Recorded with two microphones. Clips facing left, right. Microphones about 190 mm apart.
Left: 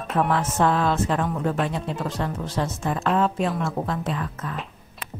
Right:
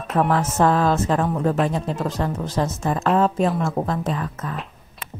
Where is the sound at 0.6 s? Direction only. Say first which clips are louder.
Right 3 dB; 40° right (ahead or behind).